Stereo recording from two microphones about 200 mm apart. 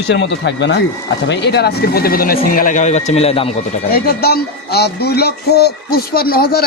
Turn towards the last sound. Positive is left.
turn(degrees=50)  # may be behind; listen again after turning